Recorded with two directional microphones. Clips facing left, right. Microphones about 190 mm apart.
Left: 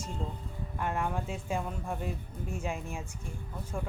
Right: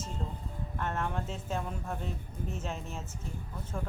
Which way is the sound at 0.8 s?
10° left (ahead or behind).